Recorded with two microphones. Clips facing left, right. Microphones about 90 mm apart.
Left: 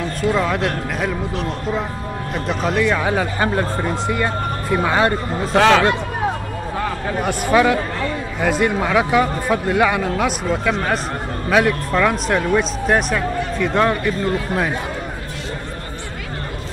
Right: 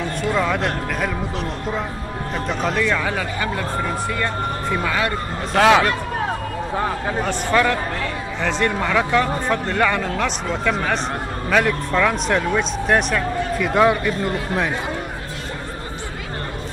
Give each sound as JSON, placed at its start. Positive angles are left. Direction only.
{"t": 0.3, "sound": "speech", "side_deg": 5}
{"t": 2.3, "sound": "speech", "side_deg": 0}
{"t": 3.0, "sound": "speech", "side_deg": 20}
{"t": 5.5, "sound": "speech", "side_deg": 0}
{"t": 7.2, "sound": "speech", "side_deg": 10}